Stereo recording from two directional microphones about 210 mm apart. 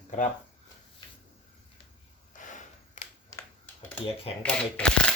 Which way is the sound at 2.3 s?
35° left (ahead or behind).